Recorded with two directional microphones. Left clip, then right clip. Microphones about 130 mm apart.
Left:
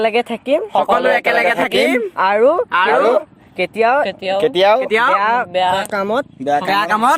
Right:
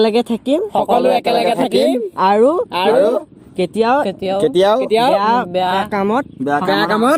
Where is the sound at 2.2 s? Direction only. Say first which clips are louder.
Right 1 dB; 35° right (ahead or behind).